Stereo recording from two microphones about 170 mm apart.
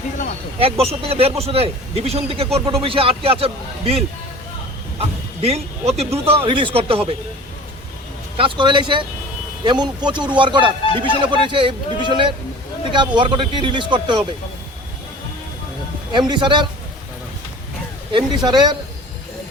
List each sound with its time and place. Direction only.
0.6 s a man's voice: 35° right (ahead or behind)
8.4 s speech: 30° right (ahead or behind)
16.1 s speech: 30° right (ahead or behind)
18.1 s speech: 25° right (ahead or behind)